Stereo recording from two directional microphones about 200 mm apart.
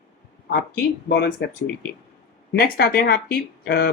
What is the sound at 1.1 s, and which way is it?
A man's voice, 55° left (ahead or behind).